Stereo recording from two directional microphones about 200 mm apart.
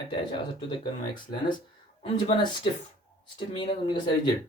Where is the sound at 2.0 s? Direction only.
30° left (ahead or behind).